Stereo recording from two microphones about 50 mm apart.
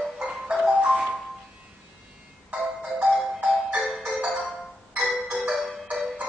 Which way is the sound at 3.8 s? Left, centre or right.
Right.